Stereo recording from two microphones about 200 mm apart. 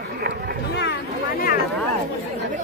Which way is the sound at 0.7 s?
60° left (ahead or behind).